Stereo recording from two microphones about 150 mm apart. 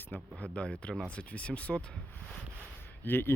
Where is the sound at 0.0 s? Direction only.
10° left (ahead or behind).